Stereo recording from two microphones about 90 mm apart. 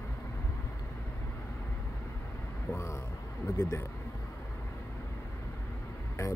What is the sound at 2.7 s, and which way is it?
Speech, 30° left (ahead or behind).